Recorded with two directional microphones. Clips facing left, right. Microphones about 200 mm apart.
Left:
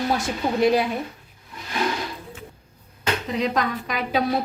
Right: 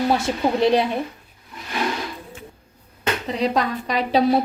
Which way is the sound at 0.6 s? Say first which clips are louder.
Even; 30° right (ahead or behind).